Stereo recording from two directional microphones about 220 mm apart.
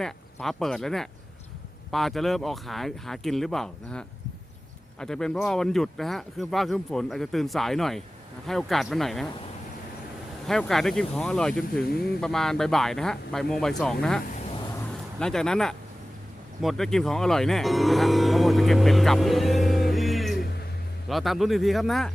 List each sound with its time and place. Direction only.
0.0 s speech: centre (ahead or behind)
10.4 s speech: centre (ahead or behind)
14.3 s a sound: 30° left (ahead or behind)
15.2 s speech: 5° left (ahead or behind)